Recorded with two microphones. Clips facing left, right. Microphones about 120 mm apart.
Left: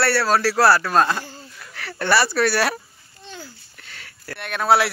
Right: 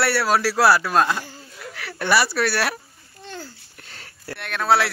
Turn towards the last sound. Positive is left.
turn(degrees=5)  # may be behind; listen again after turning